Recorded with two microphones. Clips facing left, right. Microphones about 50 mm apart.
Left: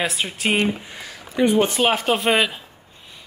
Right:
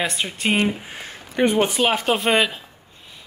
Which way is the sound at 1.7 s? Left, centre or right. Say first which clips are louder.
Even; centre.